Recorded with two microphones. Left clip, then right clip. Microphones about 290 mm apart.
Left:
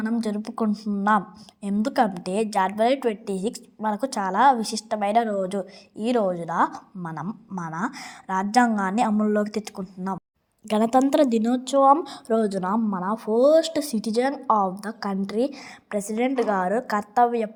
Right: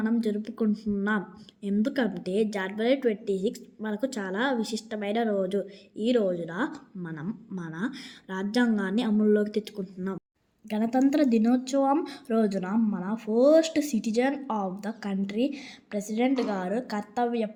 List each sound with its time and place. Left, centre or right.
0.0 s a woman's voice: centre